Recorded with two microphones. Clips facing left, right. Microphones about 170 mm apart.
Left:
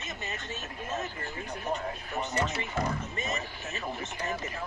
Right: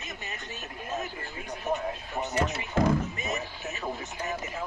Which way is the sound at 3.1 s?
5° right (ahead or behind).